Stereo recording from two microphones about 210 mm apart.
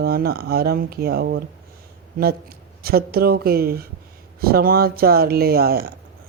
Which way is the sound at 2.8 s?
45° right (ahead or behind).